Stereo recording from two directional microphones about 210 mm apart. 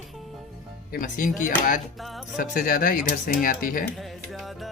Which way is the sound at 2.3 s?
40° left (ahead or behind).